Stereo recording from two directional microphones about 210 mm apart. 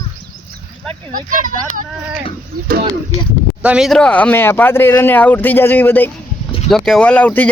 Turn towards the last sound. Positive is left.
turn(degrees=5)  # may be behind; listen again after turning